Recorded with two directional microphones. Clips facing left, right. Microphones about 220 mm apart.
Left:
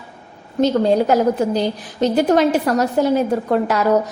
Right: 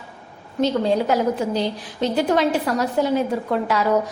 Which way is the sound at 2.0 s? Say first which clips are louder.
Left 4 dB; 45° left (ahead or behind).